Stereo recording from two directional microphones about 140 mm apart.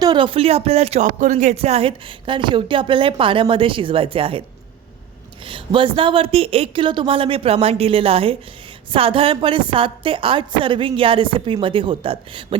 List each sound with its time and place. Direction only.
0.0 s speech: 35° right (ahead or behind)
5.5 s speech: 40° right (ahead or behind)